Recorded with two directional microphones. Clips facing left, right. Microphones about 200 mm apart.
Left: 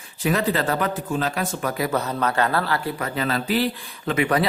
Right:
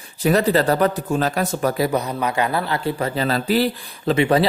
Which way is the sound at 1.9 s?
15° right (ahead or behind).